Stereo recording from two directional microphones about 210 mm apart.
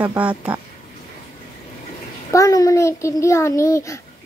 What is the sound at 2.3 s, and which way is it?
A child's voice, 15° left (ahead or behind).